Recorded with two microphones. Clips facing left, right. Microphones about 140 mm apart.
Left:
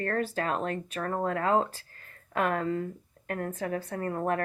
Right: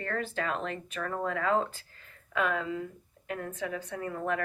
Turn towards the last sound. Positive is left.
turn(degrees=45)  # may be behind; listen again after turning